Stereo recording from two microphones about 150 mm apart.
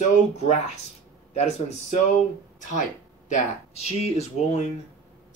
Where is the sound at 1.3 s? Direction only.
45° left (ahead or behind).